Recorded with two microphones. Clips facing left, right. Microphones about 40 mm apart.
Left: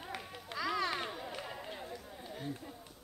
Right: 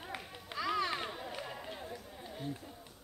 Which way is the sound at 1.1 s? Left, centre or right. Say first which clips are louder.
Even; centre.